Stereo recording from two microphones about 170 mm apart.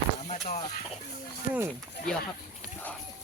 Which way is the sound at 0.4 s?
40° left (ahead or behind).